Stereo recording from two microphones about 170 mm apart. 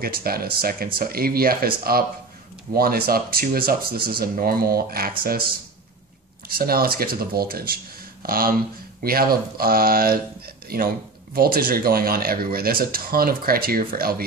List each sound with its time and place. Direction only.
0.0 s speech: 60° right (ahead or behind)
6.5 s speech: 60° right (ahead or behind)